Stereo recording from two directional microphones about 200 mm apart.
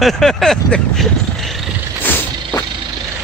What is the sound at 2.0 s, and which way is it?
Vehicle, 10° left (ahead or behind).